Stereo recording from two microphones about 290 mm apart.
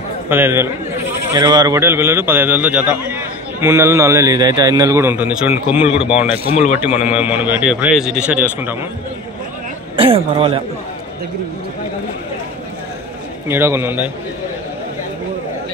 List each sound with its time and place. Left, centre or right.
0.3 s a man's voice: centre
6.5 s a man's voice: left
7.1 s speech: centre
9.9 s speech: centre
13.5 s a man's voice: centre